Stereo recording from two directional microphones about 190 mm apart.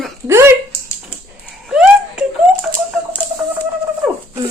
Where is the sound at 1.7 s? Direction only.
5° right (ahead or behind).